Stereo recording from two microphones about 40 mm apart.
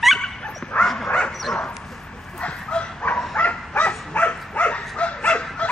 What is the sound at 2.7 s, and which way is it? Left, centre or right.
Dog, left.